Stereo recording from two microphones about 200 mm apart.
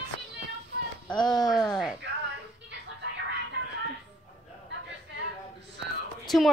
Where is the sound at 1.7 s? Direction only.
Centre (ahead or behind).